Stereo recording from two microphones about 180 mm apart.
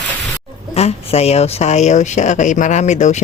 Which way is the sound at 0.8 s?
35° left (ahead or behind).